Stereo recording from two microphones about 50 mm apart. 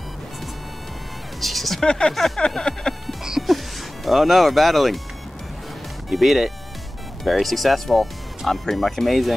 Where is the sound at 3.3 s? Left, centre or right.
Centre.